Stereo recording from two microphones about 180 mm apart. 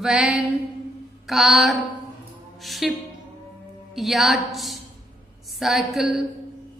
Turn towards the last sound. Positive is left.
turn(degrees=0)  # may be behind; listen again after turning